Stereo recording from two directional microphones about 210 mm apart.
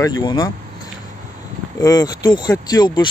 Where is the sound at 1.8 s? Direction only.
20° left (ahead or behind).